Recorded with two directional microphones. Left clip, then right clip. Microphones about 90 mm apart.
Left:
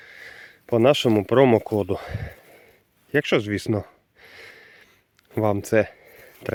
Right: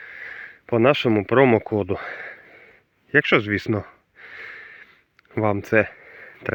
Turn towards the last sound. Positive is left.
turn(degrees=30)  # may be behind; listen again after turning